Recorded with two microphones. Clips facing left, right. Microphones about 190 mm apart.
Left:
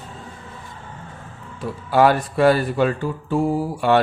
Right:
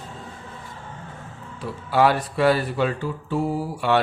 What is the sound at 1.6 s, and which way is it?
Speech, 45° left (ahead or behind).